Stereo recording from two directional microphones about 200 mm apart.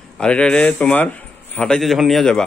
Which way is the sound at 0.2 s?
5° left (ahead or behind).